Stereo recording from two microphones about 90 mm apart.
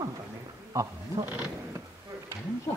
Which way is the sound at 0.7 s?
35° right (ahead or behind).